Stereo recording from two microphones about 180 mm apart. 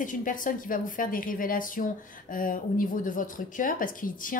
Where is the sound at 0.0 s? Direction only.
45° left (ahead or behind).